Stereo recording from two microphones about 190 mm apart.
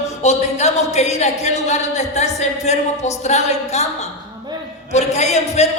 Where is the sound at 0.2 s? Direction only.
35° left (ahead or behind).